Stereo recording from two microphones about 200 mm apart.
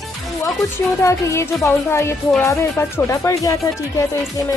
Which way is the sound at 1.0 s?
15° left (ahead or behind).